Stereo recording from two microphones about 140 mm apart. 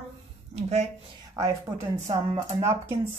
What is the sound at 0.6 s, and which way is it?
Speech, 50° right (ahead or behind).